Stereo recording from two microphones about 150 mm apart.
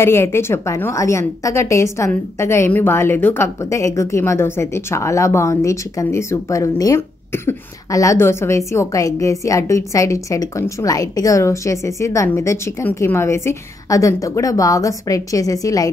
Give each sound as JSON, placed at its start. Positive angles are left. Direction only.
{"t": 0.0, "sound": "a woman's voice", "side_deg": 15}